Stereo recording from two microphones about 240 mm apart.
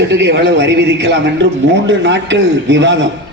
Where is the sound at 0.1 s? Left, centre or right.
Right.